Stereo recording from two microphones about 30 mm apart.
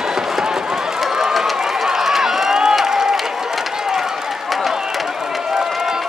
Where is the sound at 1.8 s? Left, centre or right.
Centre.